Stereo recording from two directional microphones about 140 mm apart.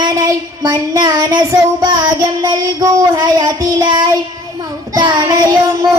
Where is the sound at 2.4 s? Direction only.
30° right (ahead or behind).